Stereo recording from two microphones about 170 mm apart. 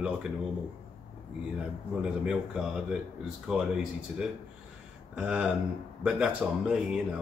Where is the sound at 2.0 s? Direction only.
5° right (ahead or behind).